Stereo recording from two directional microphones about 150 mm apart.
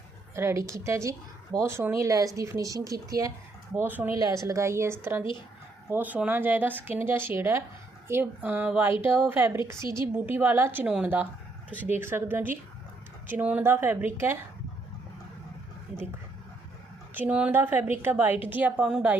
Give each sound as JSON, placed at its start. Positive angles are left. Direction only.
{"t": 0.3, "sound": "speech", "side_deg": -20}
{"t": 17.2, "sound": "speech", "side_deg": -10}